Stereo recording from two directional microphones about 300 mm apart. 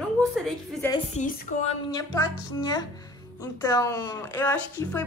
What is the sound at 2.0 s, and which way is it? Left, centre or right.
A woman's voice, centre.